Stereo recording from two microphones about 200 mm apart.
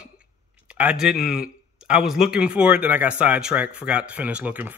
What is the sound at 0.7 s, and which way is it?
Speech, 5° right (ahead or behind).